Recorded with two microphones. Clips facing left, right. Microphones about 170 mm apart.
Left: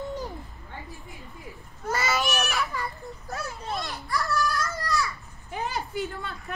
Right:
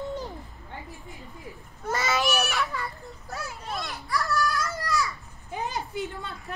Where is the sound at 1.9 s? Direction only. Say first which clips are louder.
Right 1 dB; centre (ahead or behind).